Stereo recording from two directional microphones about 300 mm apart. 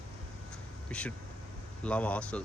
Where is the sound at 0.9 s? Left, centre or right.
Centre.